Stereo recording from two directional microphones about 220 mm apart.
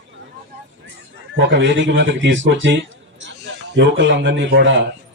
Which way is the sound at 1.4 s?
55° right (ahead or behind).